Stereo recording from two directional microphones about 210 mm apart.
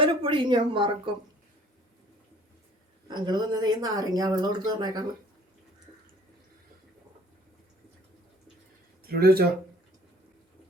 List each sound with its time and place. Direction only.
0.0 s speech: 25° right (ahead or behind)
3.1 s speech: 20° right (ahead or behind)
9.0 s speech: 45° right (ahead or behind)